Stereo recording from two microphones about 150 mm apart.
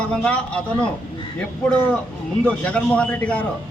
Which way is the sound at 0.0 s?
10° left (ahead or behind).